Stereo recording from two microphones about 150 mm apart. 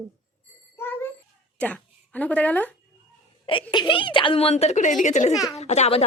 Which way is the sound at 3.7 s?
30° left (ahead or behind).